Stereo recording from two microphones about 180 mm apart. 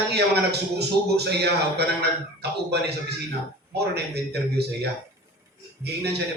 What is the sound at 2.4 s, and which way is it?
Speech, 65° right (ahead or behind).